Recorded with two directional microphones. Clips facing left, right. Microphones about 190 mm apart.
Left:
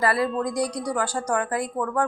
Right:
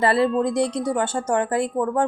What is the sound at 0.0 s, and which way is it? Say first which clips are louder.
Speech: right 4 dB; 25° right (ahead or behind).